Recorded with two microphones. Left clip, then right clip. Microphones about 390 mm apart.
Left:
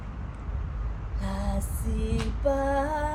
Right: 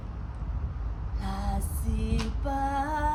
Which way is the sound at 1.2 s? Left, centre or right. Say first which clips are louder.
Left 1 dB; centre.